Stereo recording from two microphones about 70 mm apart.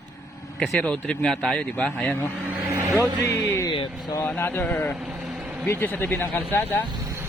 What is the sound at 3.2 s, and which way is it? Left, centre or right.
Speech, left.